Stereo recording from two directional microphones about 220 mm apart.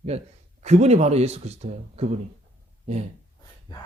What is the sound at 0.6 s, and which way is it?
Speech, 30° right (ahead or behind).